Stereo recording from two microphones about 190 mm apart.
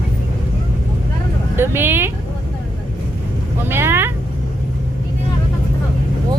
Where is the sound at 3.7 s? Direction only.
10° right (ahead or behind).